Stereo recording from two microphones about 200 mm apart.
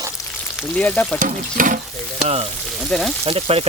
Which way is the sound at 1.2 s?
40° right (ahead or behind).